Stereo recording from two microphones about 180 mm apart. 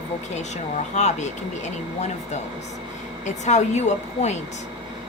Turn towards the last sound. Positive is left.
turn(degrees=40)  # may be behind; listen again after turning